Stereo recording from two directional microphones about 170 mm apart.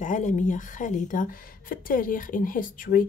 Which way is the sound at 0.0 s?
50° left (ahead or behind).